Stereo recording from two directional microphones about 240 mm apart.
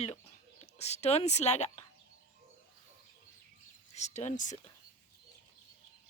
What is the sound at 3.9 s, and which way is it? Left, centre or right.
Speech, left.